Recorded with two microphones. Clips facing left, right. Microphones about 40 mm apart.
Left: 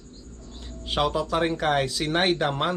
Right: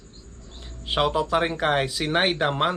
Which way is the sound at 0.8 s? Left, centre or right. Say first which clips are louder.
Right 2 dB; centre.